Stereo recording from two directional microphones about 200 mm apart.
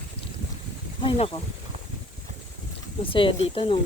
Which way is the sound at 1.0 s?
25° left (ahead or behind).